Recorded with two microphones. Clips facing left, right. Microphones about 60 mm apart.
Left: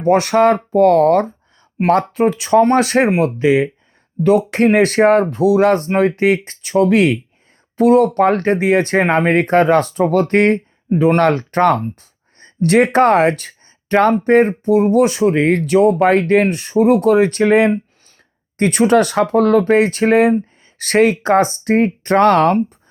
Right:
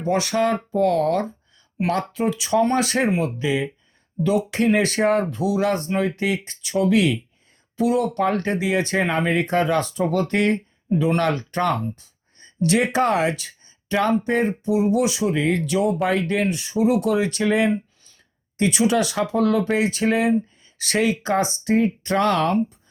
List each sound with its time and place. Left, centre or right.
0.0 s speech: left